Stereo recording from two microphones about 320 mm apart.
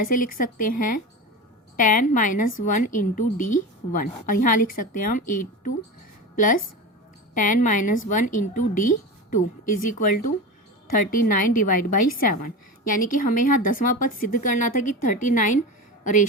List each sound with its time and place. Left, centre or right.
0.1 s a woman's voice: left